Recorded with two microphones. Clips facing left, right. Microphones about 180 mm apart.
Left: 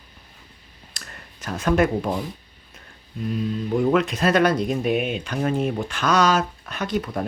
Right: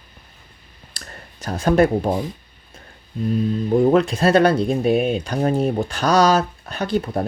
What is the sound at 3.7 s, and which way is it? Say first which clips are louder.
Speech: right 5 dB; 35° right (ahead or behind).